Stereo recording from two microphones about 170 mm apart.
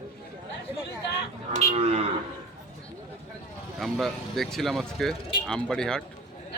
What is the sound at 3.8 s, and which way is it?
Speech, centre (ahead or behind).